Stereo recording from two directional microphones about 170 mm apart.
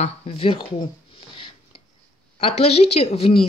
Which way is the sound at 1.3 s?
30° left (ahead or behind).